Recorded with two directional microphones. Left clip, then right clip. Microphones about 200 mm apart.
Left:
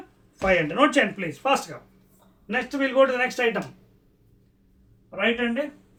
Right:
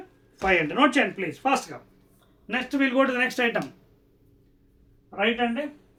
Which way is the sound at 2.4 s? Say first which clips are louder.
Even; 55° right (ahead or behind).